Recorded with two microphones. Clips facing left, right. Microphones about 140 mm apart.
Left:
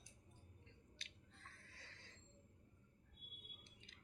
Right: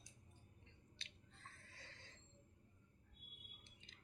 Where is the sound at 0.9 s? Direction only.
25° right (ahead or behind).